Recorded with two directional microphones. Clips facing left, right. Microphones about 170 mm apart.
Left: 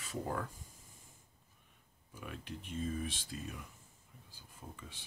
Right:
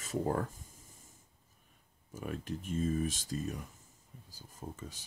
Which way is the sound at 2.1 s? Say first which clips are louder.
Right 7 dB; 45° right (ahead or behind).